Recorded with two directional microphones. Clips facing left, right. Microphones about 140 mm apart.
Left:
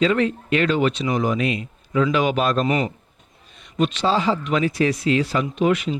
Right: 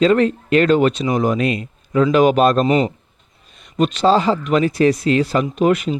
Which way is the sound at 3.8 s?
40° right (ahead or behind).